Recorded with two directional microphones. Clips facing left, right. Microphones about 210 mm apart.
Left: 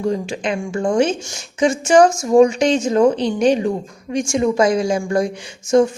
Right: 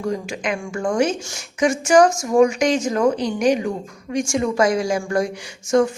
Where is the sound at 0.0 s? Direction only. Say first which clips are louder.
Left 3 dB; 25° left (ahead or behind).